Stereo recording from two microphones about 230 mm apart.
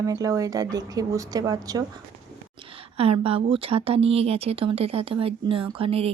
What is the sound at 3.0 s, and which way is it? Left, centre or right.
Speech, right.